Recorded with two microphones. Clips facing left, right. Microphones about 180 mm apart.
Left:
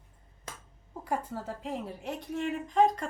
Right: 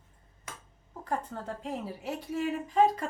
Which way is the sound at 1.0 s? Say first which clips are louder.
Left 1 dB; 10° left (ahead or behind).